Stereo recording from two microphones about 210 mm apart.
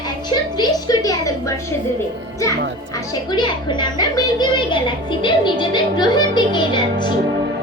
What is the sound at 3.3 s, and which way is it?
A woman's voice, 20° left (ahead or behind).